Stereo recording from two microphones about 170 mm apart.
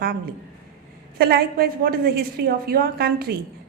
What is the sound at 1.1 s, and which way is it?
A woman's voice, 65° right (ahead or behind).